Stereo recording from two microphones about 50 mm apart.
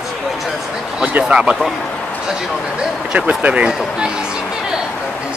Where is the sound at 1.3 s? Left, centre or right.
Right.